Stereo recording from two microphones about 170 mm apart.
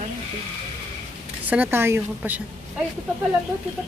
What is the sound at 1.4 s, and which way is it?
Speech, 10° right (ahead or behind).